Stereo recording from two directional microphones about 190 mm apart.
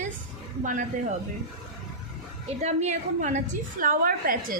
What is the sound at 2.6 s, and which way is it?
A woman's voice, 35° right (ahead or behind).